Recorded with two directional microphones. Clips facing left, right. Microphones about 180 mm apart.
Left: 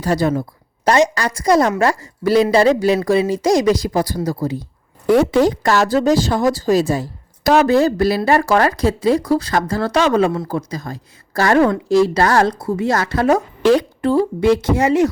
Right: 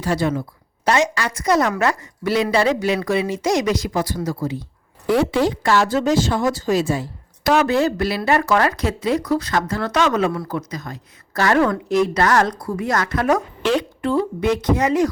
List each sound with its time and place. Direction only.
0.0 s speech: 40° left (ahead or behind)